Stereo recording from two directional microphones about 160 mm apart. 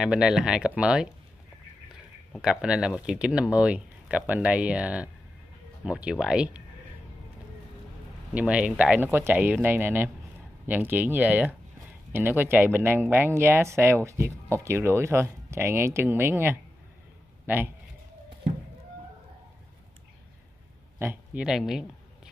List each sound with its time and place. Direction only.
0.0 s speech: 5° right (ahead or behind)
2.3 s speech: 5° right (ahead or behind)
8.3 s speech: 5° right (ahead or behind)
21.0 s speech: 10° right (ahead or behind)